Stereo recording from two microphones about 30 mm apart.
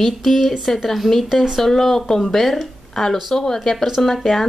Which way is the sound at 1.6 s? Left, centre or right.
Centre.